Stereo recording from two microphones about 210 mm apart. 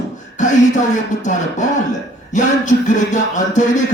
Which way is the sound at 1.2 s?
35° left (ahead or behind).